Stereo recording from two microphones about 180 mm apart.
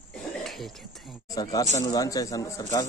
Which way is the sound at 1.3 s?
20° left (ahead or behind).